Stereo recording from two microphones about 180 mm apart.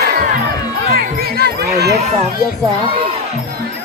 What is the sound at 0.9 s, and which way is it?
Crowd, 60° right (ahead or behind).